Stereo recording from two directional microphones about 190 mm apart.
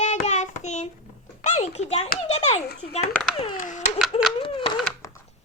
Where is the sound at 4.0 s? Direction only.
Centre (ahead or behind).